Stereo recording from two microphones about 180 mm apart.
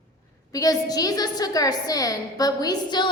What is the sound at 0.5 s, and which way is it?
A woman's voice, 20° left (ahead or behind).